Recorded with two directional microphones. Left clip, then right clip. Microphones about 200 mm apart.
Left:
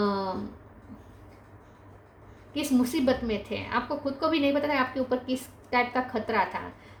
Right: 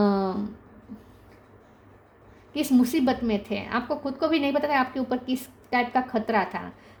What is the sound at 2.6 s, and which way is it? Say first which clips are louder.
A woman's voice: right 4 dB; 45° right (ahead or behind).